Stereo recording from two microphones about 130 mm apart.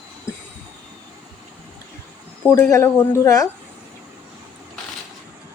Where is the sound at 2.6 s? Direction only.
20° left (ahead or behind).